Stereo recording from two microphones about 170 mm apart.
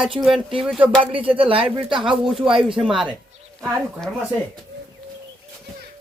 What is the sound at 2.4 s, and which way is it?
Speech, 5° right (ahead or behind).